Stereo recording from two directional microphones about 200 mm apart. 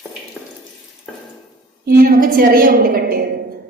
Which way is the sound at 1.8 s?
50° right (ahead or behind).